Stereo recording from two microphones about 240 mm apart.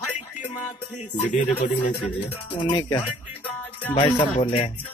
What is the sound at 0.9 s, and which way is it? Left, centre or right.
Music, left.